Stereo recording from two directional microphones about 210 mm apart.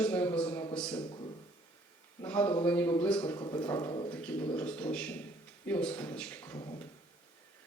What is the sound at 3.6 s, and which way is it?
A man's voice, 10° left (ahead or behind).